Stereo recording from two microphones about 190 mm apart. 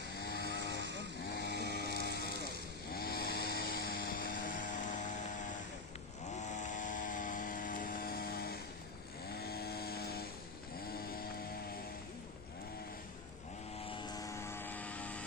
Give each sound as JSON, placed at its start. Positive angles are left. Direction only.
{"t": 0.2, "sound": "vehicle", "side_deg": 55}
{"t": 0.6, "sound": "vehicle", "side_deg": -70}
{"t": 1.2, "sound": "a sound", "side_deg": 55}
{"t": 6.3, "sound": "vehicle", "side_deg": 40}
{"t": 13.9, "sound": "vehicle", "side_deg": 20}